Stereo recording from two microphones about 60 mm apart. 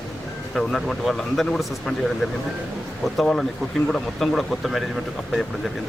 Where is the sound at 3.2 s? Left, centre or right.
Centre.